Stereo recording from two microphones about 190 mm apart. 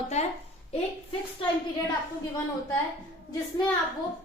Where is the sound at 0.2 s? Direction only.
35° left (ahead or behind).